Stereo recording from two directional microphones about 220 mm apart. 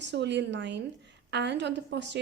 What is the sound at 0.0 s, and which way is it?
A woman's voice, 55° right (ahead or behind).